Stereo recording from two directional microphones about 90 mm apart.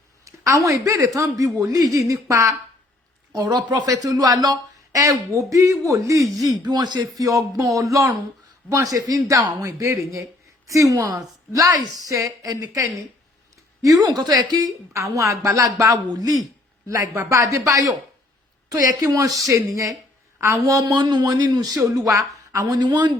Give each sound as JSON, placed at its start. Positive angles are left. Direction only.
{"t": 0.3, "sound": "speech", "side_deg": -35}
{"t": 7.2, "sound": "speech", "side_deg": -40}
{"t": 14.9, "sound": "speech", "side_deg": -35}
{"t": 22.8, "sound": "speech", "side_deg": -55}